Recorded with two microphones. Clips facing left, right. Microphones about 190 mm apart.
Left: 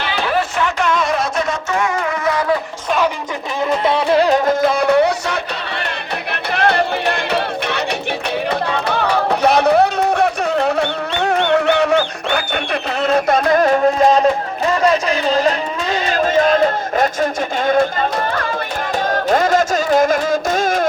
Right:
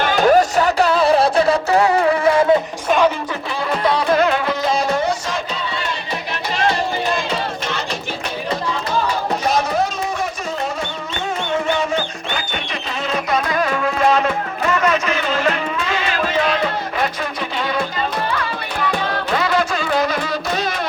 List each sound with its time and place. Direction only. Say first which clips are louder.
0.0 s music: right 6 dB; 45° right (ahead or behind); by 2.6 s 25° right (ahead or behind)
3.8 s music: left 1 dB; 25° left (ahead or behind)
4.4 s music: left 5 dB; 55° left (ahead or behind)
6.5 s music: left 3 dB; 60° left (ahead or behind)
13.0 s music: left 6 dB; 50° left (ahead or behind)